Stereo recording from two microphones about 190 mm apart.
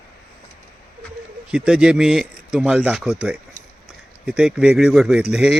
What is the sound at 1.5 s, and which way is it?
Speech, 5° right (ahead or behind).